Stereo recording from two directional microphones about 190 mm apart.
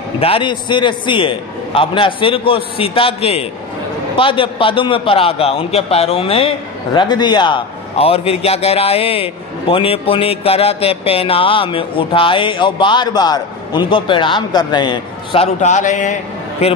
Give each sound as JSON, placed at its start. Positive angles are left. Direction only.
{"t": 0.2, "sound": "a man's voice", "side_deg": 30}
{"t": 15.6, "sound": "speech", "side_deg": 40}